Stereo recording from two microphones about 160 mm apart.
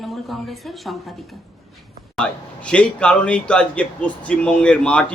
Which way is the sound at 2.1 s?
5° left (ahead or behind).